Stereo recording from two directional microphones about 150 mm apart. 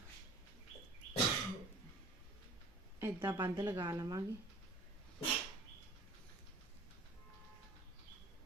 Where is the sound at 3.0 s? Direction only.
15° right (ahead or behind).